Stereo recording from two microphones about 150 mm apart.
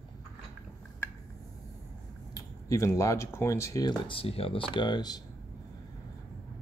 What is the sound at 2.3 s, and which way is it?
Speech, 20° left (ahead or behind).